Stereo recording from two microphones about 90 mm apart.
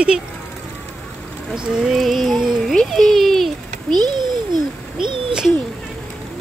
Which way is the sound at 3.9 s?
55° right (ahead or behind).